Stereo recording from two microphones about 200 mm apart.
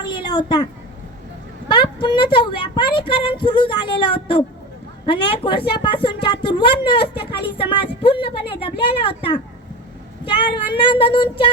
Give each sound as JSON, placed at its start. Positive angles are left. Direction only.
{"t": 0.0, "sound": "a sound", "side_deg": 20}
{"t": 1.6, "sound": "speech", "side_deg": 25}
{"t": 8.0, "sound": "speech", "side_deg": 25}